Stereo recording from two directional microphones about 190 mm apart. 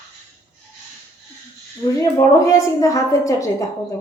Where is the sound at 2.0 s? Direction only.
15° left (ahead or behind).